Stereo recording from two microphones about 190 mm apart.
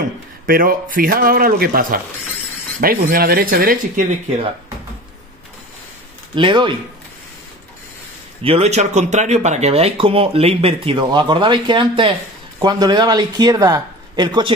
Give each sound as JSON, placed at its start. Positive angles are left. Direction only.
{"t": 0.5, "sound": "speech", "side_deg": -50}
{"t": 6.3, "sound": "speech", "side_deg": -25}
{"t": 8.4, "sound": "speech", "side_deg": -30}